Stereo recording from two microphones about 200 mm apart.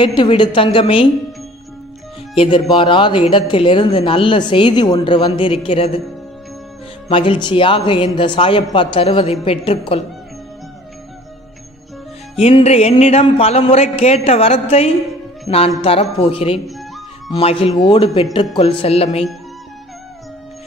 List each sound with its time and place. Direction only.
0.0 s speech: 25° left (ahead or behind)
2.3 s speech: 25° left (ahead or behind)
7.1 s speech: 25° left (ahead or behind)
12.4 s speech: 30° left (ahead or behind)